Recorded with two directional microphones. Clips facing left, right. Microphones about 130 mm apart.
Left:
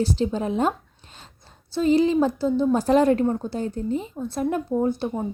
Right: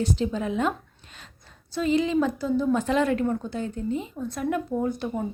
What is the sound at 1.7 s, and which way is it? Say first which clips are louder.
Speech: left 4 dB; 35° left (ahead or behind).